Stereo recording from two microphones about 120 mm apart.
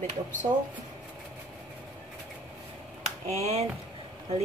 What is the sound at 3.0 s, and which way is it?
Speech, 65° right (ahead or behind).